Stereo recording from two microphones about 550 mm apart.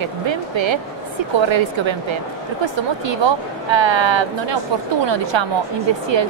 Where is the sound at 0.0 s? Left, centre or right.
Right.